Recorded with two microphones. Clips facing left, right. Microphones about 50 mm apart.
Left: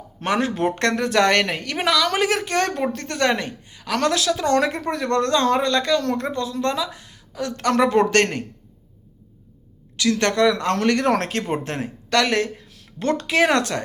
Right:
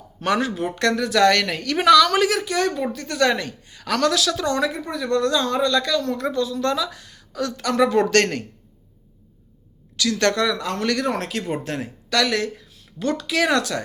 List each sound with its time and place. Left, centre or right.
0.2 s speech: left
0.5 s speech: left
4.4 s a woman's voice: left
7.5 s speech: left
10.0 s speech: left
10.5 s speech: left
11.5 s speech: left